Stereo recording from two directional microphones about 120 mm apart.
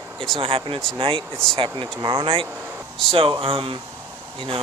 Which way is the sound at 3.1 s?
45° right (ahead or behind).